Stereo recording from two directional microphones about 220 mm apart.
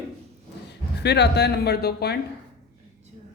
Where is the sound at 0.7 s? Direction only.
50° left (ahead or behind).